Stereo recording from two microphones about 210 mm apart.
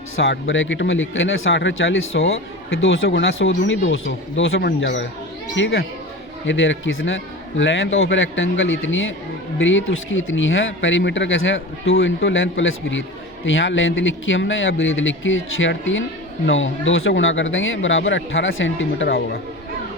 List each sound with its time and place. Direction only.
0.2 s speech: 60° left (ahead or behind)